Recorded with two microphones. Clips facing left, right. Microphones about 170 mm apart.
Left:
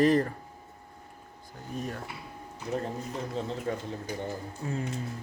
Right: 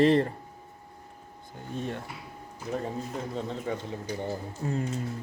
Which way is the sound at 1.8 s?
25° right (ahead or behind).